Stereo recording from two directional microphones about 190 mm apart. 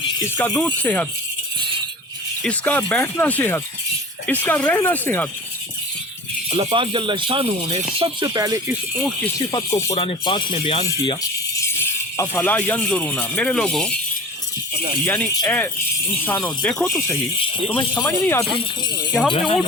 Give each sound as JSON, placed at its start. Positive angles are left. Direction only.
{"t": 0.3, "sound": "speech", "side_deg": 5}
{"t": 2.4, "sound": "speech", "side_deg": 5}
{"t": 6.6, "sound": "speech", "side_deg": -30}
{"t": 8.3, "sound": "speech", "side_deg": -20}
{"t": 8.6, "sound": "speech", "side_deg": 0}
{"t": 9.4, "sound": "speech", "side_deg": 25}
{"t": 9.9, "sound": "speech", "side_deg": 30}
{"t": 12.1, "sound": "speech", "side_deg": 10}
{"t": 15.0, "sound": "speech", "side_deg": 10}
{"t": 18.0, "sound": "speech", "side_deg": 10}